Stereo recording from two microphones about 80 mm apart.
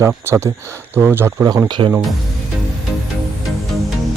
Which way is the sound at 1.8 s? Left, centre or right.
Right.